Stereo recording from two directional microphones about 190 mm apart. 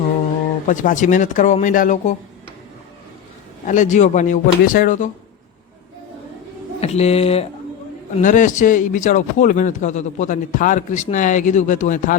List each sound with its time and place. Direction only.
0.7 s speech: 40° left (ahead or behind)
3.7 s a man's voice: 40° left (ahead or behind)
6.7 s speech: 35° left (ahead or behind)
8.2 s a man's voice: 40° left (ahead or behind)